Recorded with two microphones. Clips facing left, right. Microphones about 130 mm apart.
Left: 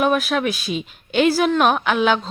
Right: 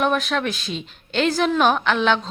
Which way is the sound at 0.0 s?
5° left (ahead or behind).